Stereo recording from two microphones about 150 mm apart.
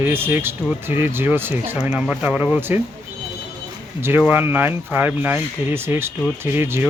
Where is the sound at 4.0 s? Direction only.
15° right (ahead or behind).